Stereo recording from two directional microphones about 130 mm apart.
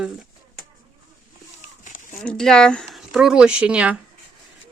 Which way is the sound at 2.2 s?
5° left (ahead or behind).